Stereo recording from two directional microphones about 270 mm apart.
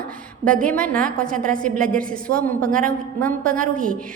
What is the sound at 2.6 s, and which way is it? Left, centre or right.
Speech, right.